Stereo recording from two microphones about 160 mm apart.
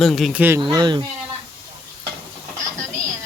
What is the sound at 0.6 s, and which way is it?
Speech, 30° right (ahead or behind).